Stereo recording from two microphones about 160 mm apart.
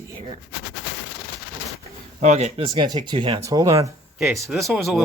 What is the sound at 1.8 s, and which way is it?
Speech, 45° right (ahead or behind).